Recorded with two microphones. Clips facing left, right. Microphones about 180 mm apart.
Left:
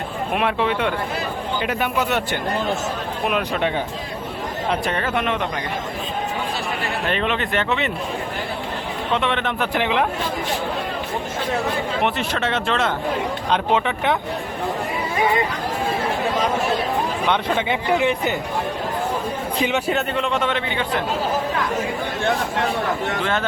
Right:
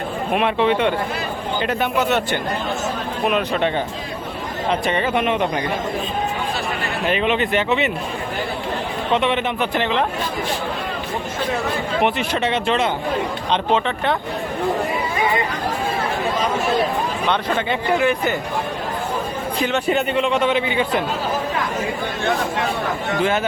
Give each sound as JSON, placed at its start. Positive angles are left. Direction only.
{"t": 0.3, "sound": "a man's voice", "side_deg": 5}
{"t": 4.7, "sound": "a man's voice", "side_deg": 0}
{"t": 7.1, "sound": "a man's voice", "side_deg": -5}
{"t": 9.1, "sound": "a man's voice", "side_deg": 0}
{"t": 9.7, "sound": "speech", "side_deg": 10}
{"t": 12.0, "sound": "a man's voice", "side_deg": 0}
{"t": 17.2, "sound": "speech", "side_deg": 15}
{"t": 19.9, "sound": "a man's voice", "side_deg": 0}
{"t": 23.2, "sound": "speech", "side_deg": -10}